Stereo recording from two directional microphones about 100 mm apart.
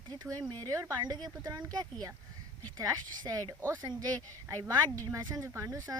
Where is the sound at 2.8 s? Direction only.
40° right (ahead or behind).